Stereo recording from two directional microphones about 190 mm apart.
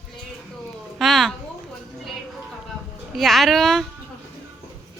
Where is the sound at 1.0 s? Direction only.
Centre (ahead or behind).